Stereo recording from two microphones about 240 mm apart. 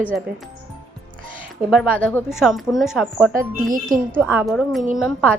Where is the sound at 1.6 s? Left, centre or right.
Centre.